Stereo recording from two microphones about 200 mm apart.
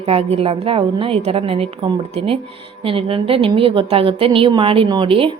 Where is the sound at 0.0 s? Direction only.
30° right (ahead or behind).